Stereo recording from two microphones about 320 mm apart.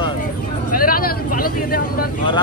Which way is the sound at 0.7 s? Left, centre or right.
Left.